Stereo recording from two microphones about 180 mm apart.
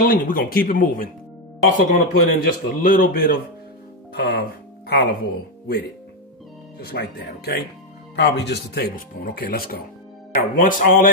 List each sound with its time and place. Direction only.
0.0 s a man's voice: 50° left (ahead or behind)
8.2 s a man's voice: 70° left (ahead or behind); by 11.1 s 50° left (ahead or behind)